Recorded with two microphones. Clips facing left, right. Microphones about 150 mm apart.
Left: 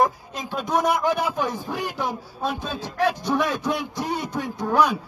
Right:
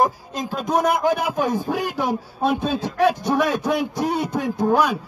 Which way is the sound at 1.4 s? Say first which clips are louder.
Right 5 dB; 55° right (ahead or behind).